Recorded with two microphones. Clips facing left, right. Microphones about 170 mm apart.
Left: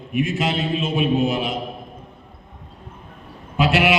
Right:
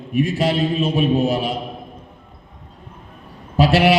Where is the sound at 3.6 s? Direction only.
35° right (ahead or behind).